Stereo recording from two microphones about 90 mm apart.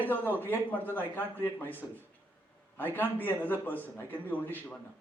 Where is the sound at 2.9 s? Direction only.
20° left (ahead or behind).